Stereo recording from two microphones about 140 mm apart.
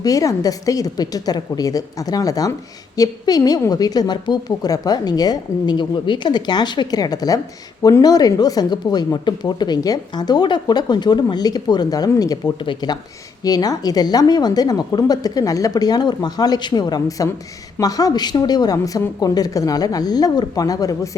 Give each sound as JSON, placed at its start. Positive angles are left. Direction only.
{"t": 0.0, "sound": "a woman's voice", "side_deg": 25}